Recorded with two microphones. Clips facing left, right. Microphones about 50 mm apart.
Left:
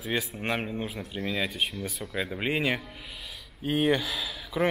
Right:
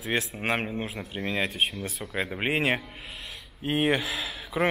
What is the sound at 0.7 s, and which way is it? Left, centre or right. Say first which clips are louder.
Speech: right 1 dB; centre.